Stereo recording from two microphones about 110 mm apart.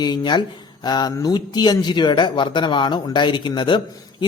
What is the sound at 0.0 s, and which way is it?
Speech, 40° left (ahead or behind).